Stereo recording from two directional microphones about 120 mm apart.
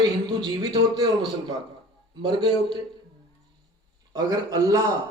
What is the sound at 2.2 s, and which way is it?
Speech, 40° right (ahead or behind).